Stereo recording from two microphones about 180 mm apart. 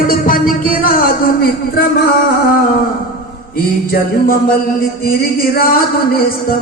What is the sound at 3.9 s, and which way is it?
Music, 50° left (ahead or behind).